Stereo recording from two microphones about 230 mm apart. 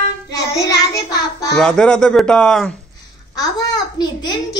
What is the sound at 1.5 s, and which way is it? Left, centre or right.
Speech, centre.